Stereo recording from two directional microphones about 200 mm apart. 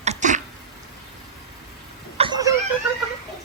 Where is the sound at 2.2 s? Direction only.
20° right (ahead or behind).